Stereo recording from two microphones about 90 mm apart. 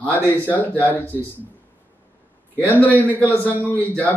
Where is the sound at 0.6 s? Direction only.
20° left (ahead or behind).